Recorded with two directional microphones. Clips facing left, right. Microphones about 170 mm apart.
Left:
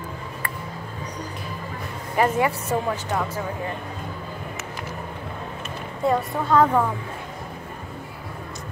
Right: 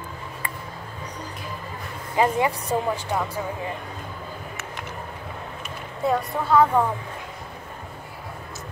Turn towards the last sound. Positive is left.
turn(degrees=-5)  # may be behind; listen again after turning